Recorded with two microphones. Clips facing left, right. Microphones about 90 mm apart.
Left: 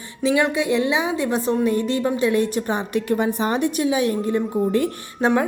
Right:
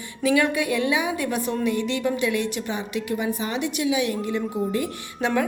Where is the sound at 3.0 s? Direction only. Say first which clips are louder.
Left 6 dB; 50° left (ahead or behind).